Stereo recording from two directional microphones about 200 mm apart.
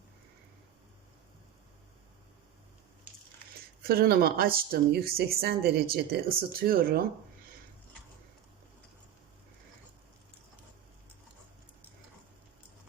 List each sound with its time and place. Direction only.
3.8 s speech: 50° right (ahead or behind)